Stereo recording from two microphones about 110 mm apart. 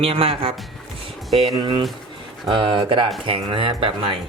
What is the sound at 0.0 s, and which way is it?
Speech, 60° right (ahead or behind).